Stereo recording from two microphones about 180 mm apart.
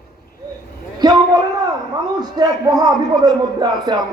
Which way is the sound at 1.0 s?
25° right (ahead or behind).